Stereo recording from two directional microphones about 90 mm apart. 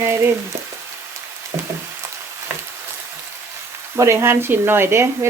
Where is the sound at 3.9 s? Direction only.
30° right (ahead or behind).